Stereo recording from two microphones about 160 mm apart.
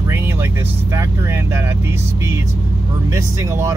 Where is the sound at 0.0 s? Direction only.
15° right (ahead or behind).